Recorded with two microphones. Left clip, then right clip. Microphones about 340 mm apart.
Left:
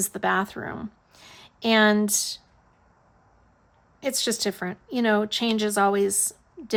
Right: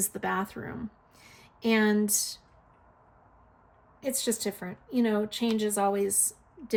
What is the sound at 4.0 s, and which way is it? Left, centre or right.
Speech, centre.